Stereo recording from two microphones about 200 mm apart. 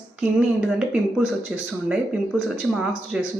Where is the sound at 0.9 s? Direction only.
5° right (ahead or behind).